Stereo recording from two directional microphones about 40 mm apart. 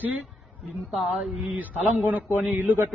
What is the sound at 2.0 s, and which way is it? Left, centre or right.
Speech, right.